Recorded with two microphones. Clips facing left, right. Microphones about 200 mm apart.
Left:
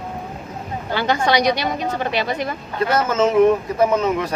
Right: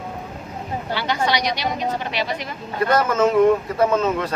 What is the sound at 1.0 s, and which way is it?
A woman's voice, 50° left (ahead or behind).